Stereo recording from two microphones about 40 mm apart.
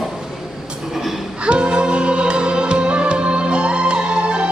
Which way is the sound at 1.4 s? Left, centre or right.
Right.